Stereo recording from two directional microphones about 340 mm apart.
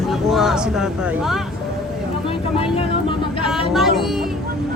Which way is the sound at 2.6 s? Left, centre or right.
Centre.